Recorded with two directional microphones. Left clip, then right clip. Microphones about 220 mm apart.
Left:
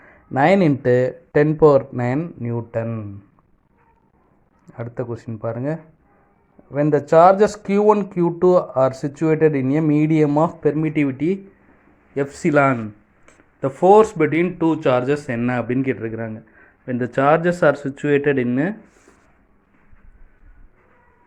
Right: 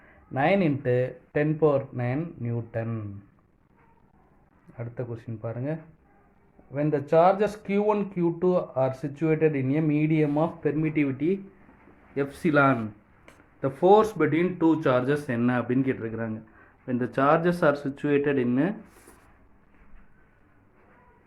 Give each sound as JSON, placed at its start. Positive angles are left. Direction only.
{"t": 0.0, "sound": "speech", "side_deg": 45}
{"t": 4.7, "sound": "speech", "side_deg": 35}
{"t": 12.1, "sound": "speech", "side_deg": 25}